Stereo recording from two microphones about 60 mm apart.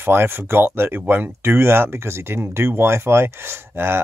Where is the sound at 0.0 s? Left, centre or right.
Right.